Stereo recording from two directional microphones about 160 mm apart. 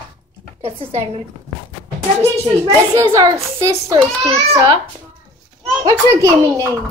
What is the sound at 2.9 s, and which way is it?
A woman's voice, 20° right (ahead or behind).